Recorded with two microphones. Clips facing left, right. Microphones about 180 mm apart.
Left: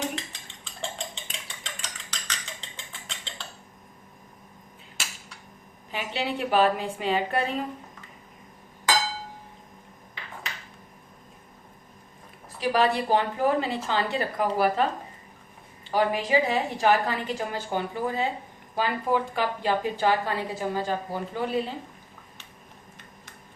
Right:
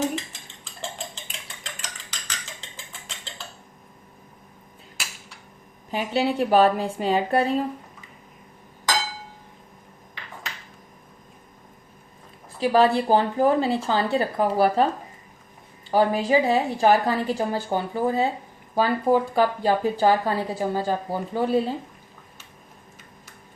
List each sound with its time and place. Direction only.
0.0 s cutlery: centre (ahead or behind)
5.9 s a woman's voice: 40° right (ahead or behind)
12.5 s a woman's voice: 30° right (ahead or behind)
15.9 s a woman's voice: 35° right (ahead or behind)